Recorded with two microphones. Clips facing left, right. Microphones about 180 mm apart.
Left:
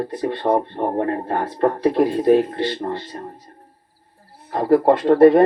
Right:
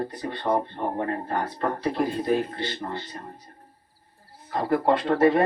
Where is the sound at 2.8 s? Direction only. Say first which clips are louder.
Left 7 dB; 35° left (ahead or behind).